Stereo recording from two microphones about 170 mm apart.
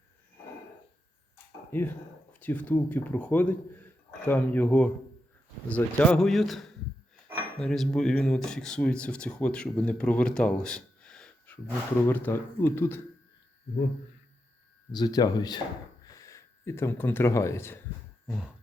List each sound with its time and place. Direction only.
1.7 s a man's voice: 10° left (ahead or behind)
14.9 s speech: 25° left (ahead or behind)
18.3 s speech: centre (ahead or behind)